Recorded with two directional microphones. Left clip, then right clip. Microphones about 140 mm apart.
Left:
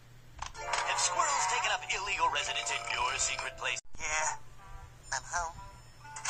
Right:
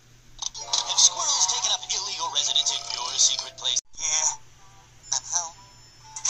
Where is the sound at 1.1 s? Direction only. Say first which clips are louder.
Right 4 dB; 20° left (ahead or behind).